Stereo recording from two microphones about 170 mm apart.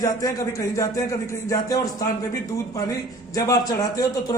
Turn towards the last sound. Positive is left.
turn(degrees=20)  # may be behind; listen again after turning